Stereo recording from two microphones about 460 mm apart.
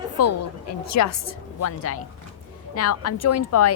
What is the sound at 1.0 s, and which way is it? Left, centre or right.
Speech, left.